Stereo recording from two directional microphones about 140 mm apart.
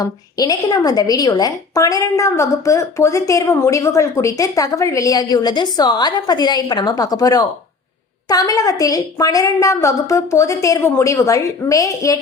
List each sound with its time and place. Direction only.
0.0 s a woman's voice: 25° left (ahead or behind)